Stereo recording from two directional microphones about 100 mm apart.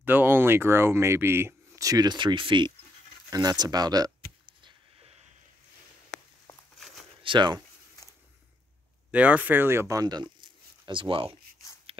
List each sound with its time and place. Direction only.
0.0 s speech: 20° right (ahead or behind)
1.8 s speech: 40° right (ahead or behind)
3.3 s speech: 40° right (ahead or behind)
7.2 s speech: 50° right (ahead or behind)
9.1 s speech: 15° right (ahead or behind); by 11.2 s 60° right (ahead or behind)